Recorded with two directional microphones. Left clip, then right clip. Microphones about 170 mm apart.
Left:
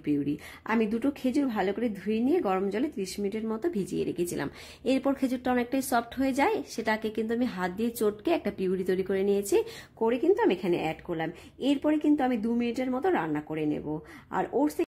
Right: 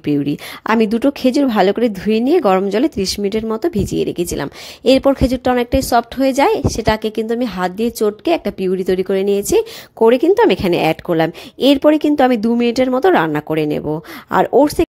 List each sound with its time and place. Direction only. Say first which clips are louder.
0.0 s speech: right 12 dB; 45° right (ahead or behind)